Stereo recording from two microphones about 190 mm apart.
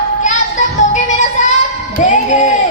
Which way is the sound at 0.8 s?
40° left (ahead or behind).